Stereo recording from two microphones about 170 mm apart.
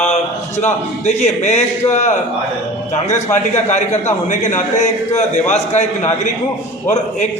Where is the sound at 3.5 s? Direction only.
45° left (ahead or behind).